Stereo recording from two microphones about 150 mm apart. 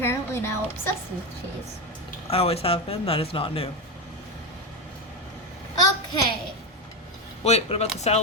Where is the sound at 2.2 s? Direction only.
40° left (ahead or behind).